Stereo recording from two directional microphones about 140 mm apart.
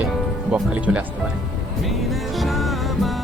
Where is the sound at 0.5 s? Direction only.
10° right (ahead or behind).